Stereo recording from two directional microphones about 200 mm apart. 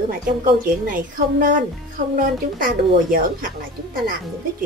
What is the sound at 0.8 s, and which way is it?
Speech, 45° right (ahead or behind).